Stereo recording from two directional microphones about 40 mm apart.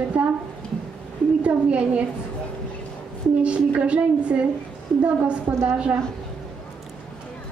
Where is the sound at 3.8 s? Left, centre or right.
Right.